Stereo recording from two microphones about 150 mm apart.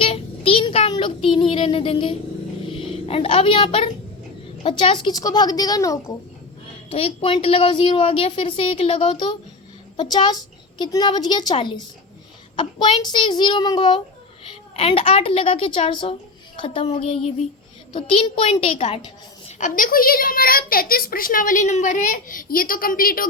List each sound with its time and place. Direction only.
0.0 s child singing: 40° left (ahead or behind)
2.6 s a woman's voice: 35° left (ahead or behind)
6.9 s a woman's voice: 40° left (ahead or behind)
19.5 s a woman's voice: 55° left (ahead or behind)